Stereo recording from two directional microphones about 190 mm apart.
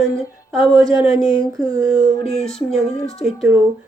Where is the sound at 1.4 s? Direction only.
20° right (ahead or behind).